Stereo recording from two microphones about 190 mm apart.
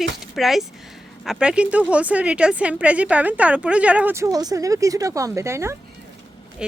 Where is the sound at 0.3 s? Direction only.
Centre (ahead or behind).